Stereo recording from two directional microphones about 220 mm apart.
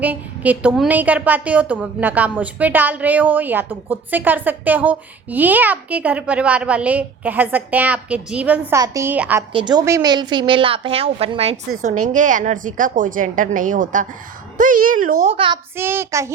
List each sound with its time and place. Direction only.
0.0 s a woman's voice: 5° right (ahead or behind)
9.5 s a woman's voice: 20° right (ahead or behind); by 15.1 s 40° right (ahead or behind)
15.2 s a woman's voice: 25° right (ahead or behind)
15.7 s a woman's voice: 10° right (ahead or behind)